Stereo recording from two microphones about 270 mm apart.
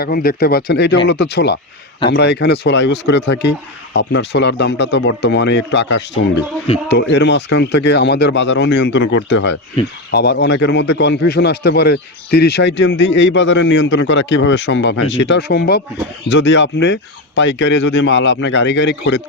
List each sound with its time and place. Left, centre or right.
0.0 s a man's voice: left